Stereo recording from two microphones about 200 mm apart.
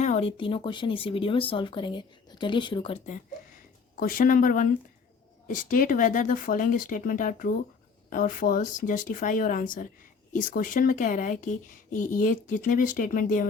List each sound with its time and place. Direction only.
0.0 s speech: 35° left (ahead or behind)
4.0 s speech: 45° left (ahead or behind)